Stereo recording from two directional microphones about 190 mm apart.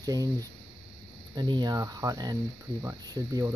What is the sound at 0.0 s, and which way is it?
Speech, 20° right (ahead or behind).